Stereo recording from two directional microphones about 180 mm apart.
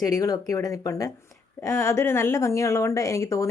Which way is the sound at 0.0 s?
20° left (ahead or behind).